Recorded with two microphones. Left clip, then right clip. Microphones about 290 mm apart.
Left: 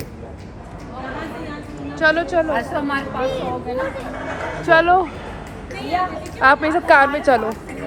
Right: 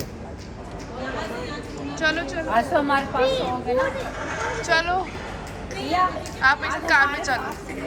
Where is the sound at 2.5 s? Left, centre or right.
Right.